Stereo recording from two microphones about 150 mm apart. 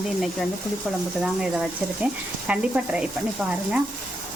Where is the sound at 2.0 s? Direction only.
10° right (ahead or behind).